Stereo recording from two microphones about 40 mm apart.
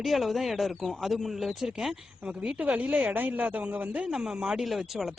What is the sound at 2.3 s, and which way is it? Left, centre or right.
Speech, right.